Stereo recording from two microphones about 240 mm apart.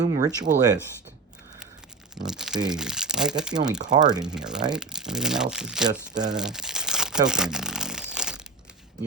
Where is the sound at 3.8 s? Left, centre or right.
Centre.